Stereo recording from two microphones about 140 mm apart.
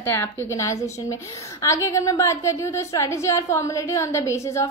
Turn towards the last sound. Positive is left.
turn(degrees=20)  # may be behind; listen again after turning